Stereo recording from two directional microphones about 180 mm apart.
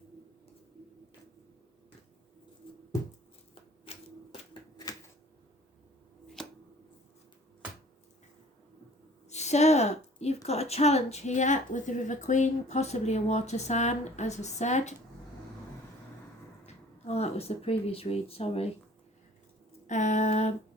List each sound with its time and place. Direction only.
6.4 s a sound: centre (ahead or behind)
9.3 s a woman's voice: 40° left (ahead or behind)
16.6 s speech: 35° left (ahead or behind)
19.9 s a woman's voice: 40° left (ahead or behind)